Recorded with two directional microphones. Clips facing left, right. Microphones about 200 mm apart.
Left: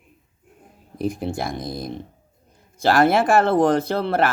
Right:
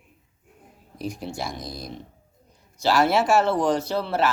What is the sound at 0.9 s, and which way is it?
Speech, 55° left (ahead or behind).